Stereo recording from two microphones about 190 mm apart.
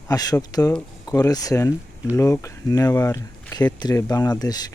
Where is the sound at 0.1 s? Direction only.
20° left (ahead or behind).